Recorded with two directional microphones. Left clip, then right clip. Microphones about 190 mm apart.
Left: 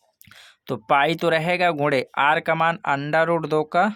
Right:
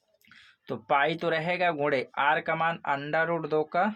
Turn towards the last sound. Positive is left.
turn(degrees=50)  # may be behind; listen again after turning